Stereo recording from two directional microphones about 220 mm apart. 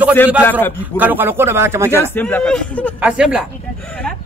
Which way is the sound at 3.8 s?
5° left (ahead or behind).